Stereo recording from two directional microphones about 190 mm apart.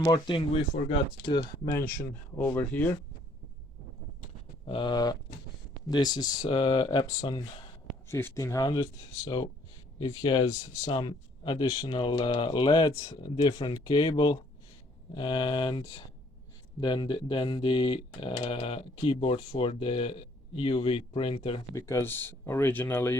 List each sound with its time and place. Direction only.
0.0 s speech: 25° left (ahead or behind); by 2.9 s 10° left (ahead or behind)
4.6 s speech: 25° left (ahead or behind)
10.5 s speech: 15° left (ahead or behind)
21.8 s speech: 15° left (ahead or behind)